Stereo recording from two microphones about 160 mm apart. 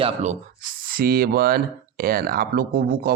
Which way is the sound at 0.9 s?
70° right (ahead or behind).